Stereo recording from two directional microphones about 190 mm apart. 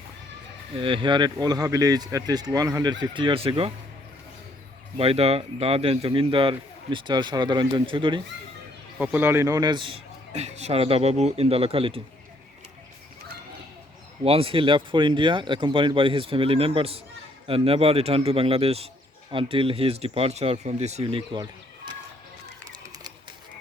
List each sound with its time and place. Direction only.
0.8 s a man's voice: 25° right (ahead or behind)
4.9 s a man's voice: 30° right (ahead or behind)
9.0 s a man's voice: 10° right (ahead or behind); by 12.0 s 30° right (ahead or behind)
14.3 s a man's voice: 30° right (ahead or behind)